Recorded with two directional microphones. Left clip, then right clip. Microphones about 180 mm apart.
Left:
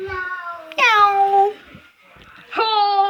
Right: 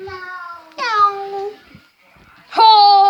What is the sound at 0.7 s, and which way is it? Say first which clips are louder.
Meow: left 2 dB; 10° left (ahead or behind).